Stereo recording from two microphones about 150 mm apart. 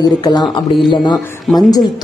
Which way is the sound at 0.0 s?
30° left (ahead or behind).